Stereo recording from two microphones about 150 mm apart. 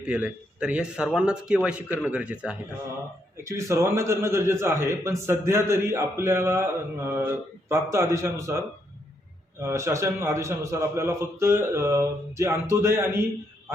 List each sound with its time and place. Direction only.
0.0 s a man's voice: 10° right (ahead or behind)
3.3 s a man's voice: 20° right (ahead or behind)